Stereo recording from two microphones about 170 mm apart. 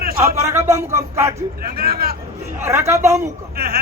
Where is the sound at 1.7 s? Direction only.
65° right (ahead or behind).